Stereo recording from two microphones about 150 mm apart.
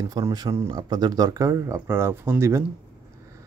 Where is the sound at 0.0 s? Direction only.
25° right (ahead or behind).